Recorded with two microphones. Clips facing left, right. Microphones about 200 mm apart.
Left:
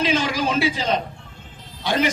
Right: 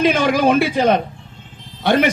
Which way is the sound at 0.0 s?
55° right (ahead or behind).